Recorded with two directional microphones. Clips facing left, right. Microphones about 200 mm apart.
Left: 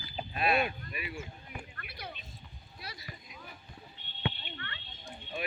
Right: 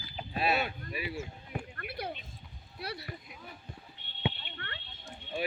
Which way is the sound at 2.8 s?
65° right (ahead or behind).